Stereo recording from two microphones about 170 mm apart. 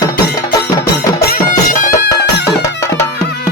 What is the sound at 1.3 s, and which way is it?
Music, 50° left (ahead or behind).